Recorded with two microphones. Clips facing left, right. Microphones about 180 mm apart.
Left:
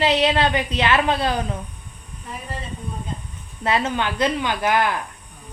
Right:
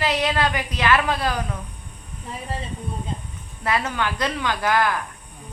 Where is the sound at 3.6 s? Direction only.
20° left (ahead or behind).